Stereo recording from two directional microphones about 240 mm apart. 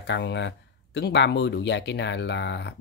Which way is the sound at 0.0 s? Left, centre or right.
Left.